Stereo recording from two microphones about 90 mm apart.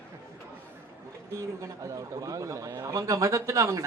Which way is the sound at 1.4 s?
35° right (ahead or behind).